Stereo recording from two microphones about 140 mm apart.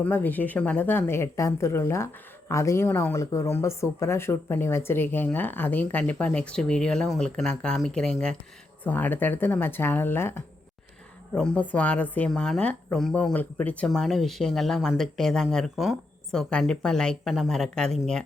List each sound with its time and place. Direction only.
0.0 s speech: 10° left (ahead or behind)